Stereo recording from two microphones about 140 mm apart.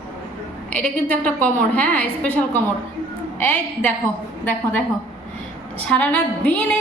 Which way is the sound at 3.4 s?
15° left (ahead or behind).